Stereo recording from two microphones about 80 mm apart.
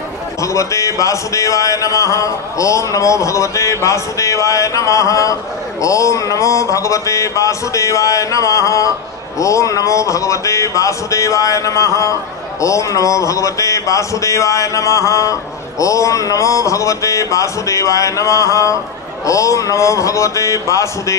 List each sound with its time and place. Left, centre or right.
0.4 s speech: left